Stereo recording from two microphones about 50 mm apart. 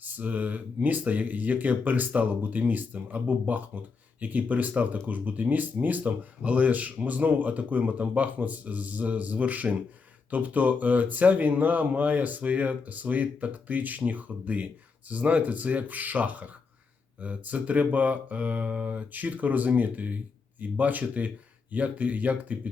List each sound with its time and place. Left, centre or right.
0.0 s speech: right